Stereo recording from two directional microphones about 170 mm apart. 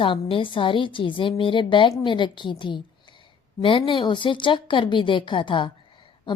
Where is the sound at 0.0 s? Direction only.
30° left (ahead or behind).